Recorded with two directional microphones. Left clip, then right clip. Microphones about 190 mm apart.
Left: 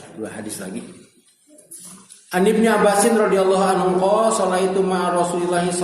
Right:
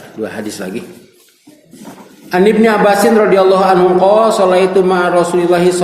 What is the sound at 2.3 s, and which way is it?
A man's voice, 30° right (ahead or behind).